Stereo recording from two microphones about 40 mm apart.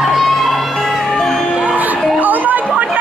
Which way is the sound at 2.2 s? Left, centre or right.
Right.